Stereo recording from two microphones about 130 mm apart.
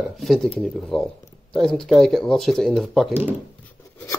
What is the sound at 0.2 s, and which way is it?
Speech, centre (ahead or behind).